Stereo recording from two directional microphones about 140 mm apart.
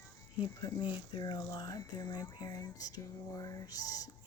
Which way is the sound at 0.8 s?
30° left (ahead or behind).